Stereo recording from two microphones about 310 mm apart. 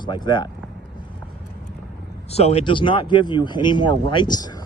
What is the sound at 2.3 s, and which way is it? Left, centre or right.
Speech, centre.